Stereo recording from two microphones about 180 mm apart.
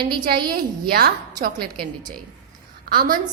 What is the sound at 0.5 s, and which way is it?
A woman's voice, 55° right (ahead or behind).